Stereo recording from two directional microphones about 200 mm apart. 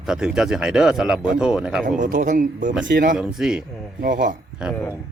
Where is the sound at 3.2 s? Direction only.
5° right (ahead or behind).